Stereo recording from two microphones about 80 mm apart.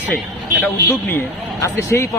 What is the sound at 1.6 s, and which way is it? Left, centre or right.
Speech, left.